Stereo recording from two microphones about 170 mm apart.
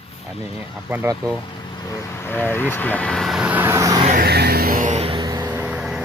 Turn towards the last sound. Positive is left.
turn(degrees=-5)  # may be behind; listen again after turning